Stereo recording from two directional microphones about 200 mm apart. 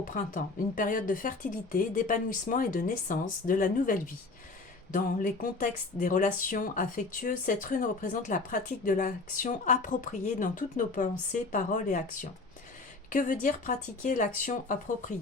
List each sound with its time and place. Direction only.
0.0 s speech: 45° left (ahead or behind)